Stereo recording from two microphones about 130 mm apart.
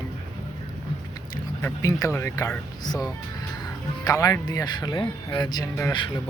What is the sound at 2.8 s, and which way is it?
Speech, 30° left (ahead or behind).